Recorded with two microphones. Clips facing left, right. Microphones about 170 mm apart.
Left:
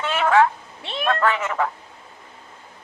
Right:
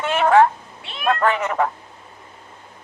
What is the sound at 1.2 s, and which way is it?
Speech, 40° right (ahead or behind).